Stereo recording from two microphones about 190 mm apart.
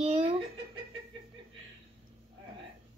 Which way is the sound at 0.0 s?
30° right (ahead or behind).